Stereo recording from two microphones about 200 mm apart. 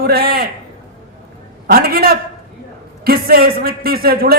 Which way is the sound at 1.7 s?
50° right (ahead or behind).